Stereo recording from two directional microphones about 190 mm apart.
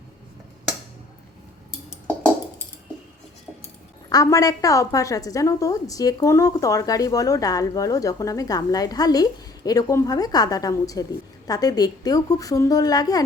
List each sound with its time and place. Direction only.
4.1 s a woman's voice: 20° left (ahead or behind)